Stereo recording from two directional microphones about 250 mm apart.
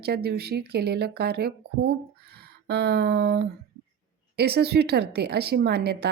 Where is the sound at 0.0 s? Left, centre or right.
Right.